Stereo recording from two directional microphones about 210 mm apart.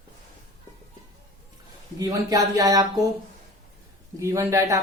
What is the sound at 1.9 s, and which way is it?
Speech, 15° right (ahead or behind).